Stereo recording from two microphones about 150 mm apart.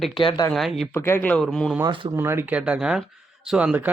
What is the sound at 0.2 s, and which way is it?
Speech, 35° left (ahead or behind).